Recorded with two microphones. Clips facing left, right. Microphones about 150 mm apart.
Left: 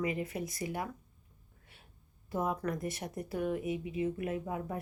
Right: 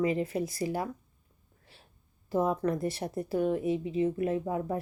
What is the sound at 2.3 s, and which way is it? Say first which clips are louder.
A woman's voice: right 6 dB; 30° right (ahead or behind).